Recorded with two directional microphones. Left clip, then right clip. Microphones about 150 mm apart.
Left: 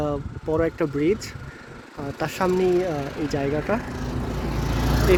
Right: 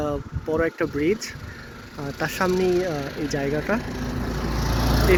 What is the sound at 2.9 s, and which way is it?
Speech, 70° left (ahead or behind).